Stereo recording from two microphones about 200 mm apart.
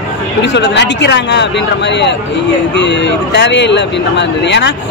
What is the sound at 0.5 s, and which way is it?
Speech, 60° left (ahead or behind).